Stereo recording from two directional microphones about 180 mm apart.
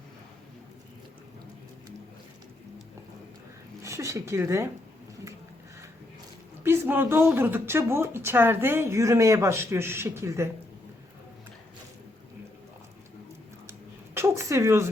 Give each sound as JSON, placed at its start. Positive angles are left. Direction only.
{"t": 3.8, "sound": "speech", "side_deg": -15}
{"t": 6.6, "sound": "a woman's voice", "side_deg": -10}
{"t": 13.7, "sound": "a sound", "side_deg": -15}